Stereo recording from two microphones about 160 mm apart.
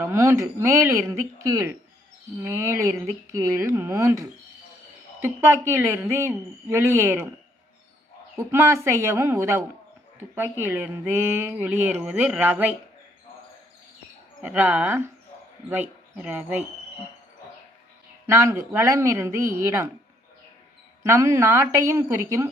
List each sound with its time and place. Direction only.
0.0 s speech: 15° right (ahead or behind)
8.4 s speech: 15° right (ahead or behind)
14.4 s speech: 10° right (ahead or behind)
16.1 s speech: 10° right (ahead or behind)
18.3 s speech: 15° right (ahead or behind)
21.1 s speech: 20° right (ahead or behind)